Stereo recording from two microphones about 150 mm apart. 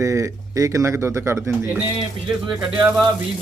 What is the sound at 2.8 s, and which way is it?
Speech, 5° right (ahead or behind).